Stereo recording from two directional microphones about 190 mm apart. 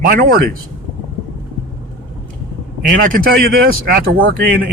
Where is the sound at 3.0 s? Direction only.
50° right (ahead or behind).